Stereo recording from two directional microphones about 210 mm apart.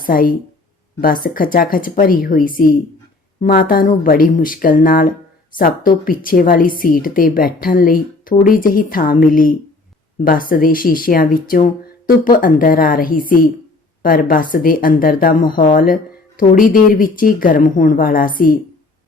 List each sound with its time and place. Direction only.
0.0 s a woman's voice: 40° left (ahead or behind)